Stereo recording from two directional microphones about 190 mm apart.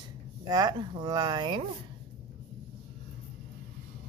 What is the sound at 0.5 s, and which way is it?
Speech, 20° right (ahead or behind).